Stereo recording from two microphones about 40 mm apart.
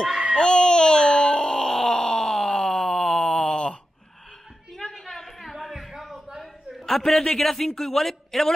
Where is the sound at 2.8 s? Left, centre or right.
Centre.